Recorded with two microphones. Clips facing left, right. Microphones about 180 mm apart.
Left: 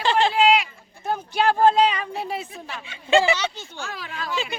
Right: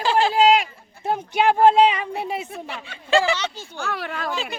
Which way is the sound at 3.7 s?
65° right (ahead or behind).